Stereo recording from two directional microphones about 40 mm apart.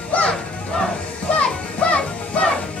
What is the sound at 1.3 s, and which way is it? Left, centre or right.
Music, left.